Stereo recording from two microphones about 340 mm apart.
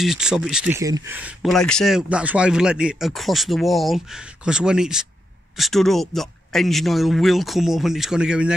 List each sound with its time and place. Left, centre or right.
0.0 s speech: centre